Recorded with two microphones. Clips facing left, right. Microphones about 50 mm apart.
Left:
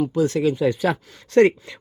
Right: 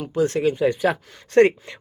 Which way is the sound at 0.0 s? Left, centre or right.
Right.